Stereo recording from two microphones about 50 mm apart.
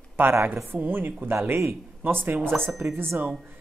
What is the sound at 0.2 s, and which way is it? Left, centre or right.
Speech, right.